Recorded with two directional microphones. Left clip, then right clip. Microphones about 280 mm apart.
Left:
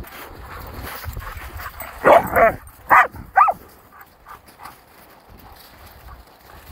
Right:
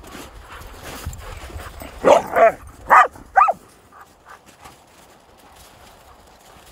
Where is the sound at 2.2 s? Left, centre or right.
Centre.